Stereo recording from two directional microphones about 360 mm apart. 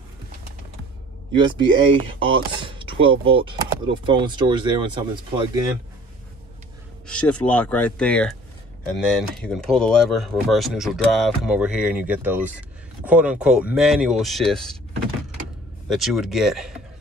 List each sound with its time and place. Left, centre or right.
1.9 s speech: centre
7.1 s speech: centre
15.9 s speech: centre